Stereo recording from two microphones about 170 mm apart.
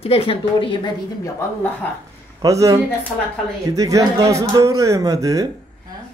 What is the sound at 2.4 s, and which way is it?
A man's voice, 20° right (ahead or behind).